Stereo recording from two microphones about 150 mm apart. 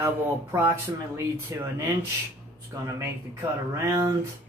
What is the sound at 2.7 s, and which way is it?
Speech, 20° right (ahead or behind).